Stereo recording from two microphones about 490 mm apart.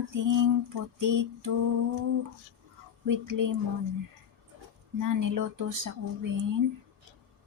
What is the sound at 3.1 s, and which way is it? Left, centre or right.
Speech, right.